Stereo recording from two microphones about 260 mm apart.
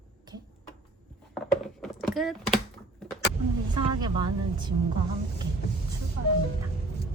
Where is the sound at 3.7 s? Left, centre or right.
Centre.